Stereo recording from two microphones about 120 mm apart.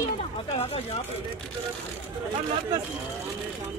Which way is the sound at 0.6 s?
60° left (ahead or behind).